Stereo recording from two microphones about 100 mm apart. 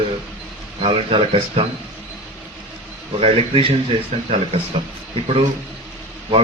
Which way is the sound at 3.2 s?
85° right.